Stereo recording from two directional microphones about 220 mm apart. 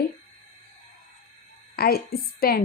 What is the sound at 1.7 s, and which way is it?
Speech, 45° left (ahead or behind).